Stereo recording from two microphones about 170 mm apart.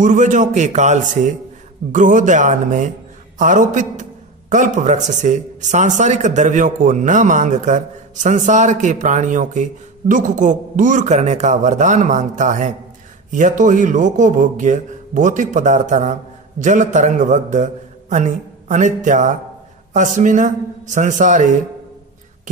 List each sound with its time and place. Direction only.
0.0 s a man's voice: 45° right (ahead or behind)